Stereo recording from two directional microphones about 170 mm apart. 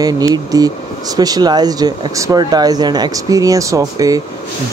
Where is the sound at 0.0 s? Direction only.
20° right (ahead or behind).